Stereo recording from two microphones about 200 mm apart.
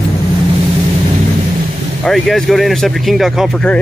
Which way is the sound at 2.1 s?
Centre (ahead or behind).